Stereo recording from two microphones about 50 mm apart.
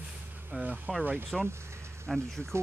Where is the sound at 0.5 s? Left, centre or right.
Right.